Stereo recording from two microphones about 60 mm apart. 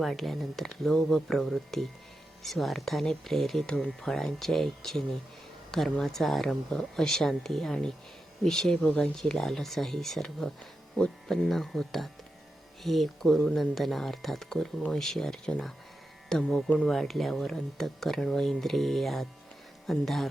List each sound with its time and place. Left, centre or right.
0.0 s speech: centre
11.3 s speech: centre
16.9 s speech: centre